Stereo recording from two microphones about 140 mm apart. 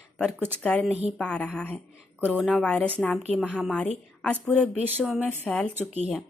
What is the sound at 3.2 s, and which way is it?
Speech, 5° right (ahead or behind).